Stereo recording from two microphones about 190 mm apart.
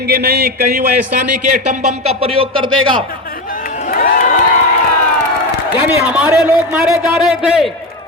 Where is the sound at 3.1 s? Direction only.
50° left (ahead or behind).